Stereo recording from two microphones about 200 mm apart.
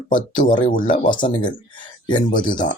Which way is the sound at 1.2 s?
40° left (ahead or behind).